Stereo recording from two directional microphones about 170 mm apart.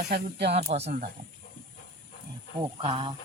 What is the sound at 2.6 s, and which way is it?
Speech, 30° right (ahead or behind).